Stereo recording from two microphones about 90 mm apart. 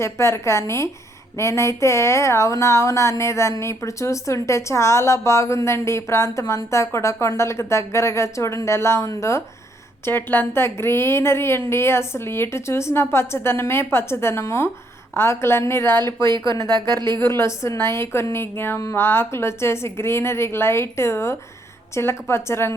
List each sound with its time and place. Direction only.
0.0 s speech: 30° left (ahead or behind)
10.1 s a woman's voice: 20° left (ahead or behind)
16.7 s speech: 55° right (ahead or behind)
17.2 s a woman's voice: 30° left (ahead or behind)